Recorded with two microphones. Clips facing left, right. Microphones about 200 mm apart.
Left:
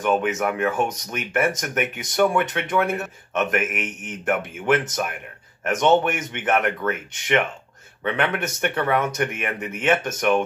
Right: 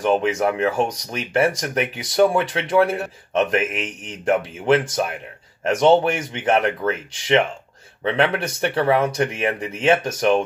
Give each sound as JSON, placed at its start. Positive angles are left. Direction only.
{"t": 0.0, "sound": "speech", "side_deg": -30}